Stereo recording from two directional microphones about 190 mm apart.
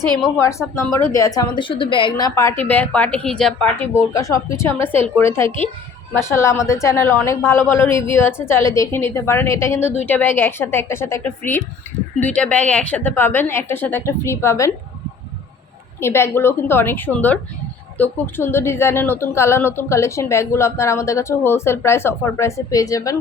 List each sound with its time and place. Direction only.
0.6 s a woman's voice: 10° left (ahead or behind)
16.0 s speech: 15° left (ahead or behind)